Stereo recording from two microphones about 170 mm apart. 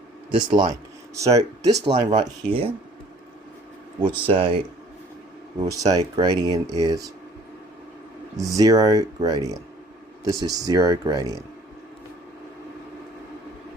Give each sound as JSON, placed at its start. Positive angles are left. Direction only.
{"t": 0.3, "sound": "speech", "side_deg": -30}
{"t": 4.0, "sound": "speech", "side_deg": -30}
{"t": 5.5, "sound": "speech", "side_deg": -20}
{"t": 8.4, "sound": "speech", "side_deg": -20}